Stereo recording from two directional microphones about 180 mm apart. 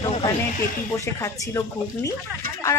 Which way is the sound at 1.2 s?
15° left (ahead or behind).